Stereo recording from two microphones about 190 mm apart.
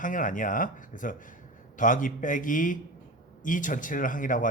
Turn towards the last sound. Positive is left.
turn(degrees=45)  # may be behind; listen again after turning